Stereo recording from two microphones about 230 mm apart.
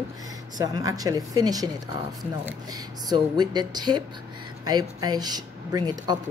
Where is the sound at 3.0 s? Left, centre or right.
Centre.